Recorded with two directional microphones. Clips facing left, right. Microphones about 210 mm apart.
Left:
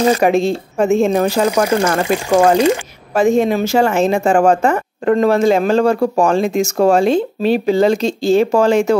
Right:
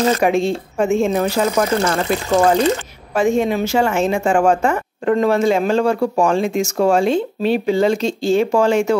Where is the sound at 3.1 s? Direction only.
35° left (ahead or behind).